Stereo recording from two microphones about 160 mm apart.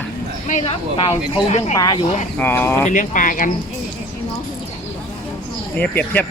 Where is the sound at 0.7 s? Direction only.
35° left (ahead or behind).